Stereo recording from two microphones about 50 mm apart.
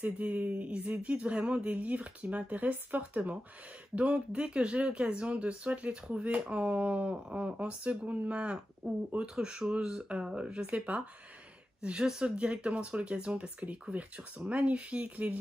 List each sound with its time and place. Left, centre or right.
0.0 s speech: right